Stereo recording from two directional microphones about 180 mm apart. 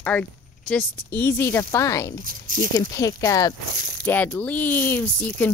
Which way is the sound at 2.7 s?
15° left (ahead or behind).